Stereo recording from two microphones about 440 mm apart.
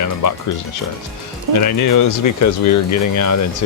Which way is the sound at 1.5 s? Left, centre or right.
Left.